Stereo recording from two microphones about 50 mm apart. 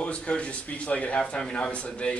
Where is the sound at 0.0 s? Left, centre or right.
Left.